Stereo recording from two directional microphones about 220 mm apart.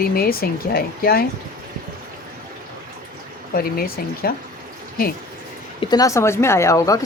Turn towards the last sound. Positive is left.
turn(degrees=15)  # may be behind; listen again after turning